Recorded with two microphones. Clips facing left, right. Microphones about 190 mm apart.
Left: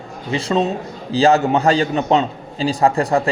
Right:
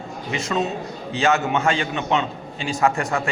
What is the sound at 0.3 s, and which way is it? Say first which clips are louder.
A man's voice: left 6 dB; 30° left (ahead or behind).